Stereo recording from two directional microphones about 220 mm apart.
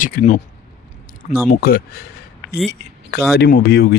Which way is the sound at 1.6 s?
45° left (ahead or behind).